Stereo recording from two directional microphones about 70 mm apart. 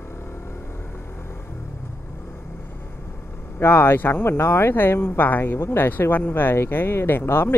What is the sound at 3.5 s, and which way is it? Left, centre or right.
Speech, left.